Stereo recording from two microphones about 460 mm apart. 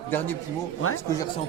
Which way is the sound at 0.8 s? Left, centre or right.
Left.